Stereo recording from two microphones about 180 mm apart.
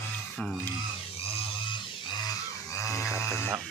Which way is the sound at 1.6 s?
25° left (ahead or behind).